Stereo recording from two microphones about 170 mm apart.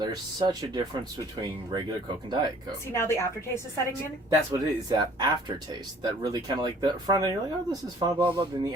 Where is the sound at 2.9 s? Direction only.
15° left (ahead or behind).